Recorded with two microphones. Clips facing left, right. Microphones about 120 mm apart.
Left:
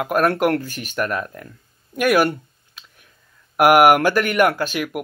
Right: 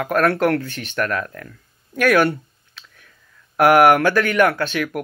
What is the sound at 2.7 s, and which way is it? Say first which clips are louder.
Whispering: right 2 dB; 15° left (ahead or behind).